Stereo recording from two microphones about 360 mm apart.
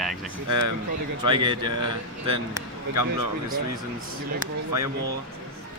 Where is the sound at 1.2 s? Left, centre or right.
Centre.